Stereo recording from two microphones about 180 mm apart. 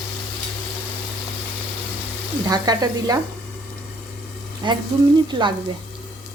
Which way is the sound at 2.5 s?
20° right (ahead or behind).